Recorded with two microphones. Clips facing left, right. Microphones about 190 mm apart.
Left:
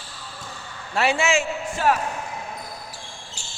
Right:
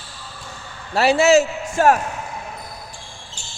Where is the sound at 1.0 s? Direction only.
40° right (ahead or behind).